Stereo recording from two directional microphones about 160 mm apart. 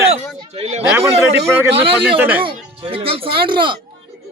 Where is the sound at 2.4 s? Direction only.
35° right (ahead or behind).